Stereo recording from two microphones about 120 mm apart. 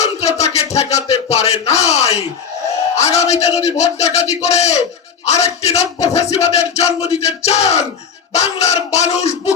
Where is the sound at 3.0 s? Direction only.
65° left (ahead or behind).